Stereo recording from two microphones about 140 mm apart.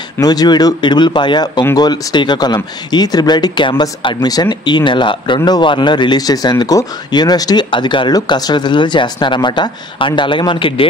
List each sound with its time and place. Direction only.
0.2 s speech: 30° left (ahead or behind)